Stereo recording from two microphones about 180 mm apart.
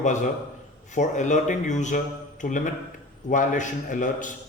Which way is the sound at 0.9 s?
40° left (ahead or behind).